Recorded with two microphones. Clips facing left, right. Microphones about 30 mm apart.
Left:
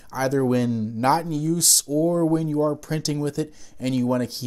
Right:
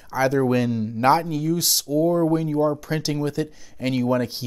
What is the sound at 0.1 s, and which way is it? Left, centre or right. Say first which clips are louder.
Speech: right 2 dB; centre.